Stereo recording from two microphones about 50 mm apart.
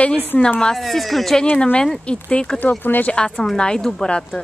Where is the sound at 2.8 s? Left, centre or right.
Left.